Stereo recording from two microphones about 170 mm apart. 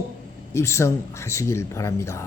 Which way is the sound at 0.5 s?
15° left (ahead or behind).